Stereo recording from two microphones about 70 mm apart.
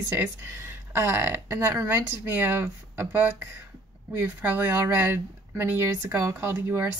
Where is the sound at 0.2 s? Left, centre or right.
Right.